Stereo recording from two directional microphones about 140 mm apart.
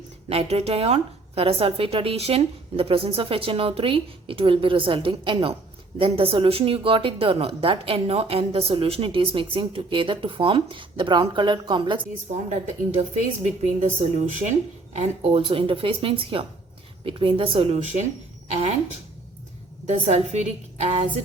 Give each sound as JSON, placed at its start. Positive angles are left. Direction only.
{"t": 0.3, "sound": "speech", "side_deg": -45}
{"t": 12.5, "sound": "a woman's voice", "side_deg": -50}
{"t": 19.9, "sound": "a woman's voice", "side_deg": -50}